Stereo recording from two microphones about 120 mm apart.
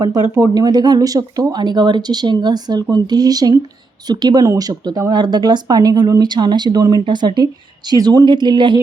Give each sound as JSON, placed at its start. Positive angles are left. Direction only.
{"t": 0.5, "sound": "speech", "side_deg": -35}